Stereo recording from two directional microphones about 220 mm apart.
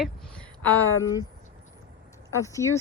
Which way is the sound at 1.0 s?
15° left (ahead or behind).